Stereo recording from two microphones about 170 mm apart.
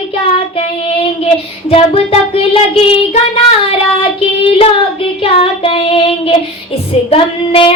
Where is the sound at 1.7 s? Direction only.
35° left (ahead or behind).